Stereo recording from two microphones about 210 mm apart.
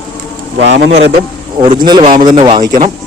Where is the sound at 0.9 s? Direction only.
30° right (ahead or behind).